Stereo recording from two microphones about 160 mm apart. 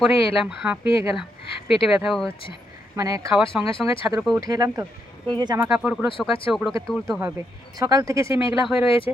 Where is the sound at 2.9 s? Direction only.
20° right (ahead or behind).